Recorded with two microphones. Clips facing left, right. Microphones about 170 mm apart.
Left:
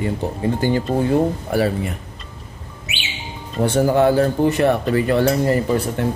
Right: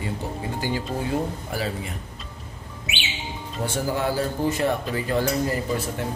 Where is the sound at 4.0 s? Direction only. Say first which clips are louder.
Left 10 dB; 60° left (ahead or behind).